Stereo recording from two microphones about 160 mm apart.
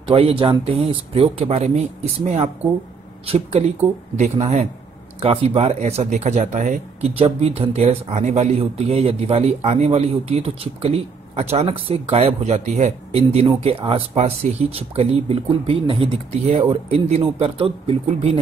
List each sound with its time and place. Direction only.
0.1 s a man's voice: 35° right (ahead or behind); by 7.1 s 50° right (ahead or behind)
7.2 s a man's voice: 40° right (ahead or behind)